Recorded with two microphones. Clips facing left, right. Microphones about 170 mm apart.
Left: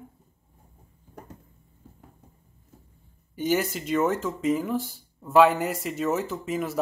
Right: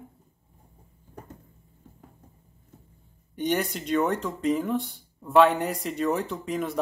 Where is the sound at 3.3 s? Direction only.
Centre (ahead or behind).